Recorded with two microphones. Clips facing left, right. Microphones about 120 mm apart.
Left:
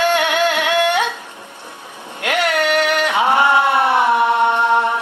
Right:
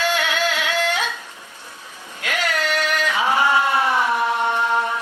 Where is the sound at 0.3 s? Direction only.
55° left (ahead or behind).